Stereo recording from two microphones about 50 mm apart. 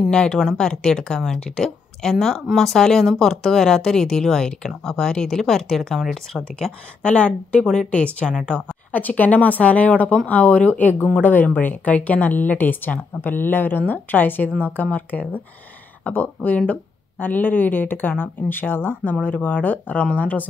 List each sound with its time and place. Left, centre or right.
0.1 s speech: centre
7.0 s a woman's voice: left
7.6 s speech: centre
7.9 s a woman's voice: left
8.9 s speech: left
19.2 s speech: left